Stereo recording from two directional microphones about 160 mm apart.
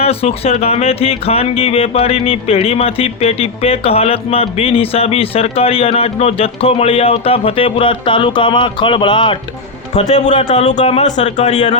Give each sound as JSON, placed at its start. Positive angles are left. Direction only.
{"t": 0.0, "sound": "speech", "side_deg": 40}
{"t": 9.9, "sound": "a man's voice", "side_deg": 45}